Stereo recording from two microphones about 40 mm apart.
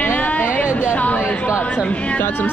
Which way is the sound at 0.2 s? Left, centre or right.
Left.